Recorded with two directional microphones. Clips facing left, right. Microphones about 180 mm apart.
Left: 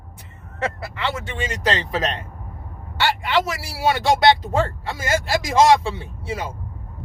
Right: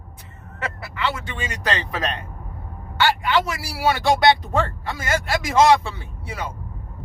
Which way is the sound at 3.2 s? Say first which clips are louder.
Even; 25° left (ahead or behind).